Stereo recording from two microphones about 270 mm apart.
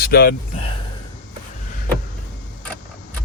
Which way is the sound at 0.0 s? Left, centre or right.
Left.